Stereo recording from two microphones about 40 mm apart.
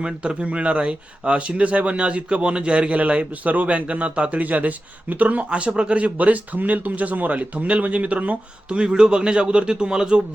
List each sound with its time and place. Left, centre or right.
0.0 s speech: right
8.8 s a man's voice: centre